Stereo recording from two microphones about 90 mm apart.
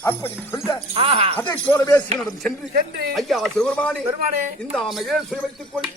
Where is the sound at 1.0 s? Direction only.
90° right.